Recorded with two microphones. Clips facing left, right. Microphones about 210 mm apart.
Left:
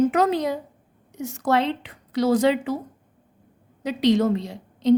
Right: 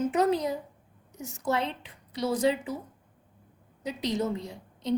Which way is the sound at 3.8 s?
90° left.